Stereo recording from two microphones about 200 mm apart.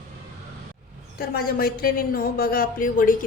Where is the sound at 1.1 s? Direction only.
50° left (ahead or behind).